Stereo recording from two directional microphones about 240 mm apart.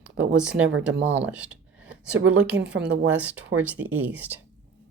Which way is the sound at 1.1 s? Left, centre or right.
Centre.